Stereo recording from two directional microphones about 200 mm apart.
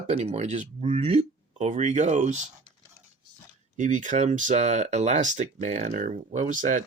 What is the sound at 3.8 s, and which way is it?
Speech, 40° right (ahead or behind).